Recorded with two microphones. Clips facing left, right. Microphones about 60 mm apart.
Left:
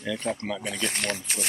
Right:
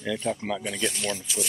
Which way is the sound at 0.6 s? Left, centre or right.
Left.